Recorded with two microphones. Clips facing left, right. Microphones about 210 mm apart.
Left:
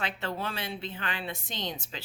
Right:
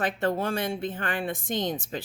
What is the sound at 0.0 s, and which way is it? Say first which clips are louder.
A woman's voice: right 7 dB; 50° right (ahead or behind).